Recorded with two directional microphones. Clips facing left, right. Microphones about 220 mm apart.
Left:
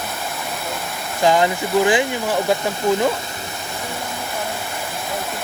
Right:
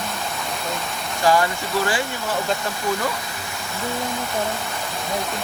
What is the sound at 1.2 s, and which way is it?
Speech, 20° left (ahead or behind).